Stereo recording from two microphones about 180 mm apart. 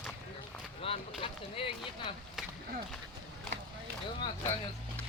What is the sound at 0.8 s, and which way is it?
Speech, 30° left (ahead or behind).